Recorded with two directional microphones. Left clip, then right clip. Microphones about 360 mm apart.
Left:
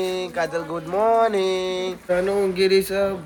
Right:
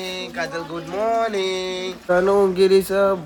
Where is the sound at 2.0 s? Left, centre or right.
Centre.